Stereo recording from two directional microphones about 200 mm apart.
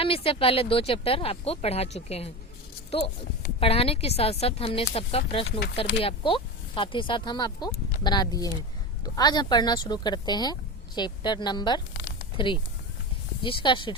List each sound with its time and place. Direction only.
0.0 s speech: 30° left (ahead or behind)
3.6 s speech: 30° left (ahead or behind)